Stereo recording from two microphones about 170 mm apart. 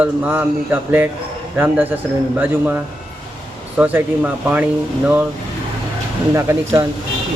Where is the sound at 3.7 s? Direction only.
10° right (ahead or behind).